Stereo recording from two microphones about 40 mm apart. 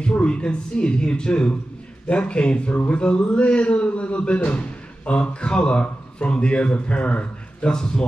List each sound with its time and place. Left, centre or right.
0.0 s speech: left
7.6 s speech: centre